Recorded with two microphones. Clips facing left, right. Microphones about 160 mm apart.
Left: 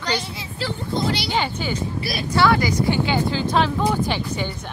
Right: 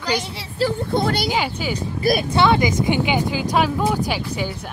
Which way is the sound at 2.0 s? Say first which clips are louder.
Right 8 dB; 50° right (ahead or behind).